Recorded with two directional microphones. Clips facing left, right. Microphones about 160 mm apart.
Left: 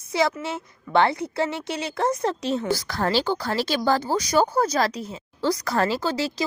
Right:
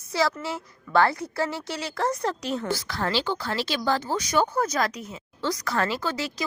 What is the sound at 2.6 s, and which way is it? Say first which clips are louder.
Speech: left 4 dB; 40° left (ahead or behind).